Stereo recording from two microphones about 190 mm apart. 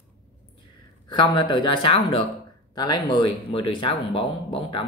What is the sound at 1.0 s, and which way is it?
Speech, 25° left (ahead or behind).